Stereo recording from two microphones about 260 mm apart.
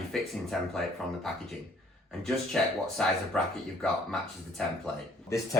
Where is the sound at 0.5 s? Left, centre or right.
Centre.